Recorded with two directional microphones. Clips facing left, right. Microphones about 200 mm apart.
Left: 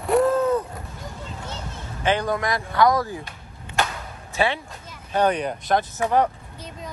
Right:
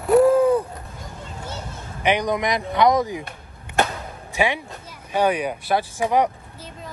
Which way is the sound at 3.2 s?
55° right (ahead or behind).